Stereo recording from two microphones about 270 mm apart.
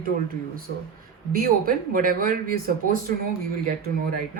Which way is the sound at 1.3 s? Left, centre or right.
Right.